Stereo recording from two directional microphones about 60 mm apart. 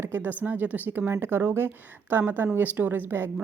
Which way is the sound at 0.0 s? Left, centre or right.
Right.